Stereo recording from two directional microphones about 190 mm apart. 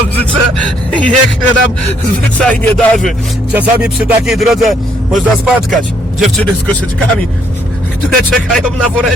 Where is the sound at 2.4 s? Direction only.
5° left (ahead or behind).